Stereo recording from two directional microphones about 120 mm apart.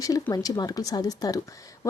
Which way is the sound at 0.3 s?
30° left (ahead or behind).